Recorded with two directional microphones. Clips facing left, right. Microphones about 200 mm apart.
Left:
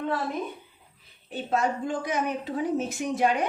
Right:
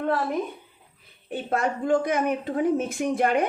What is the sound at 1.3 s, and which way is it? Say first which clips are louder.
A woman's voice: right 1 dB; 55° right (ahead or behind).